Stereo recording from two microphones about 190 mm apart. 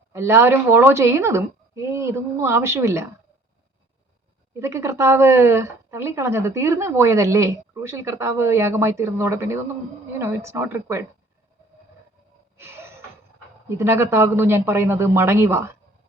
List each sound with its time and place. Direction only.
0.1 s speech: 15° right (ahead or behind)
4.6 s speech: 15° right (ahead or behind)
12.5 s gasp: 10° right (ahead or behind)
13.7 s speech: 15° right (ahead or behind)